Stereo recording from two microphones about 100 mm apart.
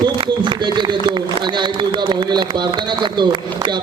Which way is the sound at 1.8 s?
55° right (ahead or behind).